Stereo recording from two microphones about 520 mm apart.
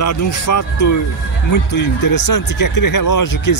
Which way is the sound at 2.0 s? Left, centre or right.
Left.